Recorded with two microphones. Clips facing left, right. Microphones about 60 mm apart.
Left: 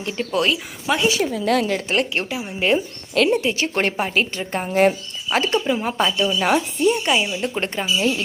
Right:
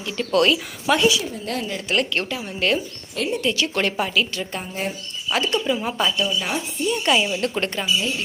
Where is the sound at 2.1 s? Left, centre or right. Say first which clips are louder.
Left 1 dB; centre.